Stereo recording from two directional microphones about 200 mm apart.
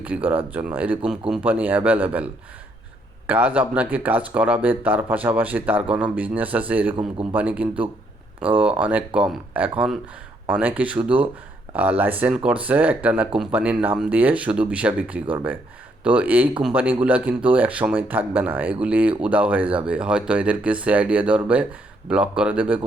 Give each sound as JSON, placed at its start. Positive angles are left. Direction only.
{"t": 0.1, "sound": "speech", "side_deg": -5}